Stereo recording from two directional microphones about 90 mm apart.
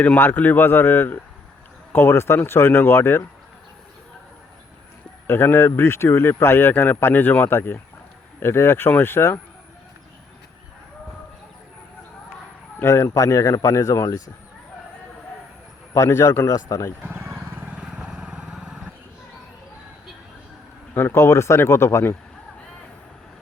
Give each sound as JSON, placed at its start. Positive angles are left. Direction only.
{"t": 0.0, "sound": "speech", "side_deg": 20}
{"t": 5.3, "sound": "speech", "side_deg": 25}
{"t": 12.8, "sound": "speech", "side_deg": 30}
{"t": 16.0, "sound": "speech", "side_deg": 30}
{"t": 17.0, "sound": "wild animals", "side_deg": -25}
{"t": 17.7, "sound": "vehicle", "side_deg": -10}
{"t": 20.9, "sound": "speech", "side_deg": 25}